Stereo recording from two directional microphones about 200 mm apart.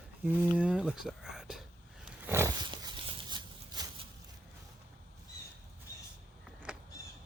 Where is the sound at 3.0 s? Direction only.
20° right (ahead or behind).